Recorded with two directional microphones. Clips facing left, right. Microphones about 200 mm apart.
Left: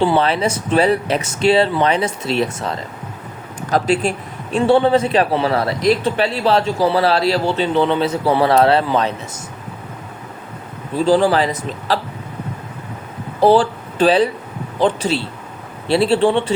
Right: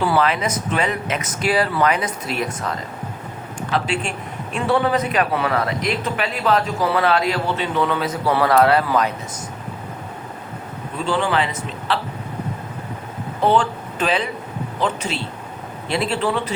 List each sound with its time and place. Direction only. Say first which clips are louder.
0.0 s a man's voice: left 3 dB; 30° left (ahead or behind)
3.7 s a man's voice: left 6 dB; 40° left (ahead or behind)
4.5 s a man's voice: left 6 dB; 30° left (ahead or behind)
10.9 s a man's voice: left 7 dB; 35° left (ahead or behind)
13.4 s a man's voice: left 5 dB; 35° left (ahead or behind)